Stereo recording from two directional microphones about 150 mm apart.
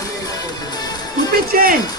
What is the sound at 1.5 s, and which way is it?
Music, 80° right.